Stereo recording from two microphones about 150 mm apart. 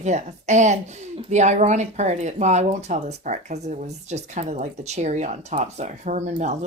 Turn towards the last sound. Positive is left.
turn(degrees=-50)  # may be behind; listen again after turning